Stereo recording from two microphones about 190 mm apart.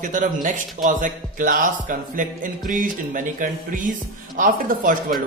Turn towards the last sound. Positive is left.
turn(degrees=-45)  # may be behind; listen again after turning